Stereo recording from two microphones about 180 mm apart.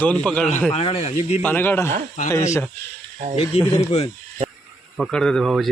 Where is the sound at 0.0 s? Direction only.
5° left (ahead or behind).